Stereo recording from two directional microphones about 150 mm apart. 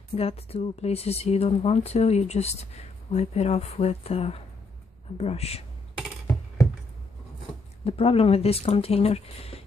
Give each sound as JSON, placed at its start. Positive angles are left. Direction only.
{"t": 0.1, "sound": "speech", "side_deg": 40}
{"t": 7.8, "sound": "speech", "side_deg": 40}